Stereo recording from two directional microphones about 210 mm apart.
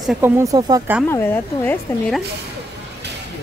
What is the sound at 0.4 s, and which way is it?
Speech, 15° right (ahead or behind).